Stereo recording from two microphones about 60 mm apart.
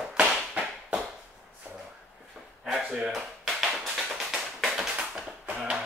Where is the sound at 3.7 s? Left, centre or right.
Centre.